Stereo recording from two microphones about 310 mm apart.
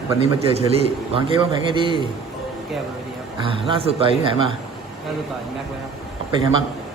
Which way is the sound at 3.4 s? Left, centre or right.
Centre.